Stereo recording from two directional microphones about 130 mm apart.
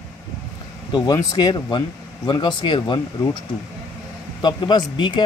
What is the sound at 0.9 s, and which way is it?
Speech, 35° left (ahead or behind).